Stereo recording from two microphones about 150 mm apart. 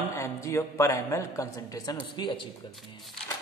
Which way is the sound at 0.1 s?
20° left (ahead or behind).